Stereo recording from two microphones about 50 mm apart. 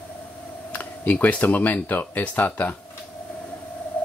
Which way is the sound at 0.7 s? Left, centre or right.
Left.